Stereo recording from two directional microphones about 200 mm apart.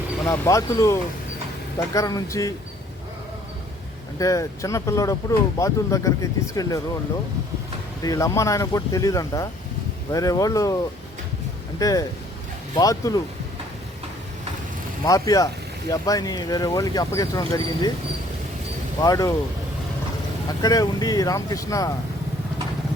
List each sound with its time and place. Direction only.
0.3 s speech: 15° left (ahead or behind)
4.2 s speech: 15° left (ahead or behind)
8.0 s speech: 15° left (ahead or behind)
11.8 s speech: 15° left (ahead or behind)
15.0 s speech: 15° left (ahead or behind)
19.0 s speech: 15° left (ahead or behind)
20.6 s speech: 20° left (ahead or behind)